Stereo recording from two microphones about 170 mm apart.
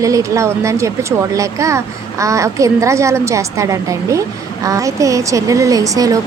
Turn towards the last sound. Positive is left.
turn(degrees=-20)  # may be behind; listen again after turning